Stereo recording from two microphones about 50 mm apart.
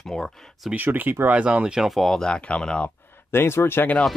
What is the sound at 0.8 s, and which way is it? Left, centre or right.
Speech, right.